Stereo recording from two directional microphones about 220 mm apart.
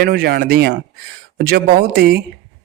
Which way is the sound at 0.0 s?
45° right (ahead or behind).